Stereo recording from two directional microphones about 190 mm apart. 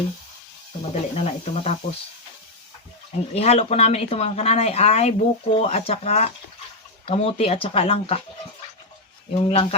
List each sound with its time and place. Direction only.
0.8 s speech: 35° left (ahead or behind)
3.3 s speech: 35° left (ahead or behind)
9.3 s speech: 30° left (ahead or behind)